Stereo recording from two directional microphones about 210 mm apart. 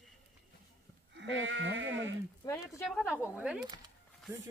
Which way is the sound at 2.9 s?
Centre (ahead or behind).